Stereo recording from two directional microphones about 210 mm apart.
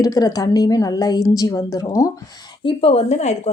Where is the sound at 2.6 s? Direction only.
30° left (ahead or behind).